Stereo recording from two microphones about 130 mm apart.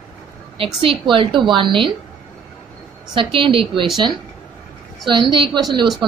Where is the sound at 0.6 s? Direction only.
45° right (ahead or behind).